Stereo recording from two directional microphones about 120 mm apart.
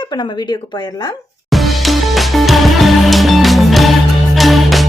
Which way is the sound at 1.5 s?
Centre (ahead or behind).